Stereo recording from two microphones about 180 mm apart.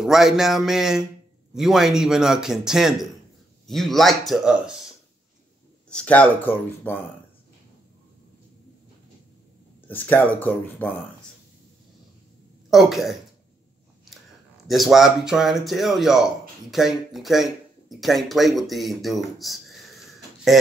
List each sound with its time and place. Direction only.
0.0 s speech: 5° right (ahead or behind)
9.8 s speech: 10° left (ahead or behind)
12.6 s speech: centre (ahead or behind)
14.7 s speech: centre (ahead or behind)